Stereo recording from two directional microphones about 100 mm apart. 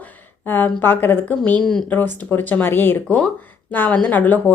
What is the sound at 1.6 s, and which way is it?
Speech, 5° left (ahead or behind).